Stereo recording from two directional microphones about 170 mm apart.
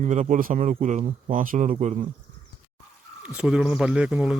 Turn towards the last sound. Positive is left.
turn(degrees=-5)  # may be behind; listen again after turning